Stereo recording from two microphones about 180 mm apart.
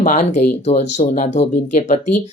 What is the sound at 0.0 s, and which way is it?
Speech, 45° left (ahead or behind).